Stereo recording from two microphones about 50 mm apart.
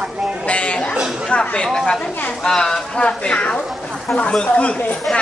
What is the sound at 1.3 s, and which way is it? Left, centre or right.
Speech, left.